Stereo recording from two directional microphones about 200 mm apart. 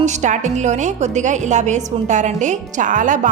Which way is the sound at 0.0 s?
35° right (ahead or behind).